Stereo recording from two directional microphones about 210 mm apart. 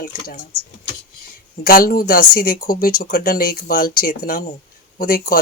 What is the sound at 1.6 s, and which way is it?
Speech, 45° left (ahead or behind).